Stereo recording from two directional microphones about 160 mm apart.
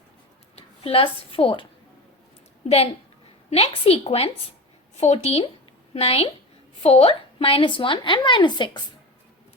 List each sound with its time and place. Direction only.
0.5 s a woman's voice: 35° left (ahead or behind)
2.6 s speech: 40° left (ahead or behind)